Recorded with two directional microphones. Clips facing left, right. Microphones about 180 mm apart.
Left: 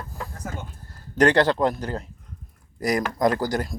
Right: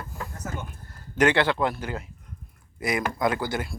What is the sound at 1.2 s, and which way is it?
Speech, 40° left (ahead or behind).